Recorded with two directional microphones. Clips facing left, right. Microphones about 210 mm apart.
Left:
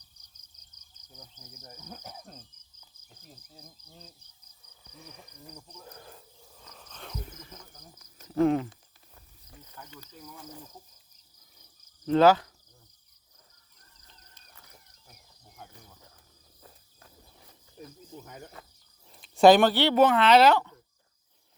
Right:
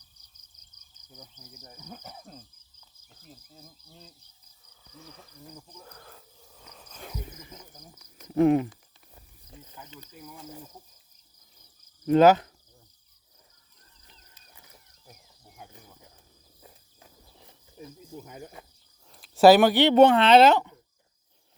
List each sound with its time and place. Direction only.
1.1 s speech: 10° right (ahead or behind)
1.8 s cricket: centre (ahead or behind)
4.9 s speech: 20° left (ahead or behind)
5.4 s cricket: centre (ahead or behind)
6.6 s speech: 5° right (ahead or behind)
9.1 s snake: 25° right (ahead or behind)
10.1 s speech: 5° right (ahead or behind)
12.0 s speech: 15° right (ahead or behind)
14.1 s wild animals: 15° right (ahead or behind)
15.5 s cricket: 15° right (ahead or behind)
17.7 s speech: 5° right (ahead or behind)
19.1 s speech: 5° right (ahead or behind)
20.0 s speech: 30° right (ahead or behind)